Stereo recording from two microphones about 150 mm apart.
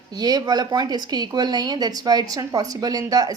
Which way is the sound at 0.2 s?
25° right (ahead or behind).